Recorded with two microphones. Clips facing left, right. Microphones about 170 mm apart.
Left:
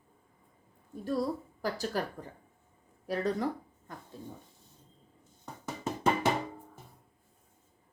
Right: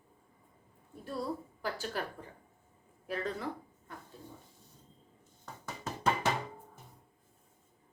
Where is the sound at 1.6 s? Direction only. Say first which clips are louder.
Left 4 dB; 40° left (ahead or behind).